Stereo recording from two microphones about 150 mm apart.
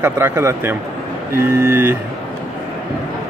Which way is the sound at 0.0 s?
15° right (ahead or behind).